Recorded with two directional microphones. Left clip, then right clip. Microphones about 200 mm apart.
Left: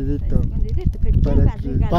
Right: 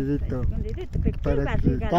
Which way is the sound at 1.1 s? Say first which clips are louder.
Left 2 dB; 10° left (ahead or behind).